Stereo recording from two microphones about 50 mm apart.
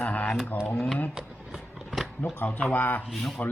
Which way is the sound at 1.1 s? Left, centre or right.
Centre.